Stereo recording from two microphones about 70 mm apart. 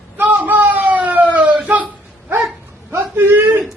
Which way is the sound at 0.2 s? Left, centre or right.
Right.